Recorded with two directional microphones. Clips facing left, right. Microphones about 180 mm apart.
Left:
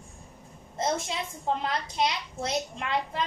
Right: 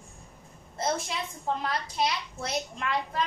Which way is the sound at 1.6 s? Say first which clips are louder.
Left 1 dB; 20° left (ahead or behind).